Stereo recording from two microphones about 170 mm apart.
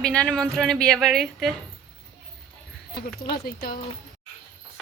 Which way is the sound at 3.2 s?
60° left (ahead or behind).